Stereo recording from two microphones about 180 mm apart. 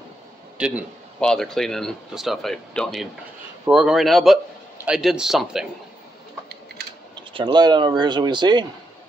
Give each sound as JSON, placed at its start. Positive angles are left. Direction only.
{"t": 0.6, "sound": "speech", "side_deg": -5}
{"t": 7.2, "sound": "speech", "side_deg": -25}